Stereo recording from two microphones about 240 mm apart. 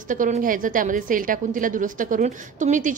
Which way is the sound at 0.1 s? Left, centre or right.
Right.